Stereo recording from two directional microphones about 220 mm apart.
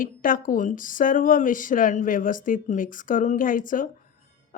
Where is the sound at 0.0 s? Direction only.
40° left (ahead or behind).